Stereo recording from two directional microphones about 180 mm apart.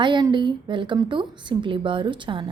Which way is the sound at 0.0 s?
25° right (ahead or behind).